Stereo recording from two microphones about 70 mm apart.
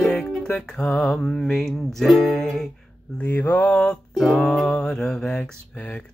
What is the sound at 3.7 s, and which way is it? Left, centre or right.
Music, centre.